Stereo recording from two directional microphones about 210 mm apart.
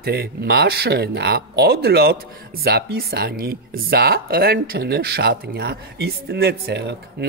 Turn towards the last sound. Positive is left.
turn(degrees=-55)  # may be behind; listen again after turning